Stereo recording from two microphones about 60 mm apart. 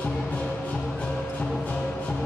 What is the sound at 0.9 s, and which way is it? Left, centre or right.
Music, centre.